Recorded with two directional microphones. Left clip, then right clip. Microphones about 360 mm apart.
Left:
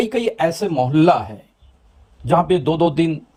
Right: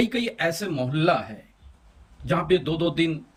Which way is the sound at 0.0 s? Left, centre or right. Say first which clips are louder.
Left 6 dB; centre.